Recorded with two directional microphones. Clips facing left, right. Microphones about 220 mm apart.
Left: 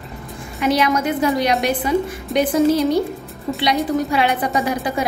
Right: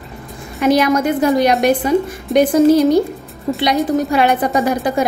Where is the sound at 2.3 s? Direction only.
Centre (ahead or behind).